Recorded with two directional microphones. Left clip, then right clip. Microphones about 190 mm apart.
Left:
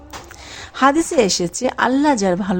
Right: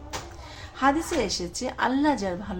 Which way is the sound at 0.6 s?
45° left (ahead or behind).